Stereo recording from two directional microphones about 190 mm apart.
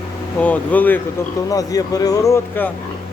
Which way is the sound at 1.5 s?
20° left (ahead or behind).